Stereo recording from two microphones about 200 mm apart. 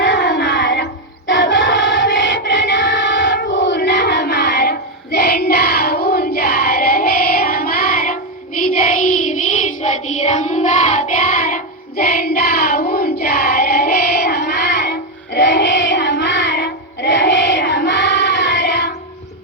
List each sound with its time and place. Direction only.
0.0 s child singing: 55° left (ahead or behind)
1.3 s choir: 60° left (ahead or behind)